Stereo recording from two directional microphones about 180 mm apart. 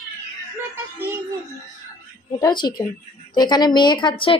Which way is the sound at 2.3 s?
25° left (ahead or behind).